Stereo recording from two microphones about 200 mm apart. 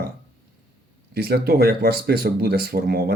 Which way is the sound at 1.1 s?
50° right (ahead or behind).